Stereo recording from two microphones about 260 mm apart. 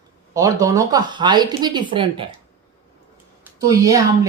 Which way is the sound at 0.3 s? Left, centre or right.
Centre.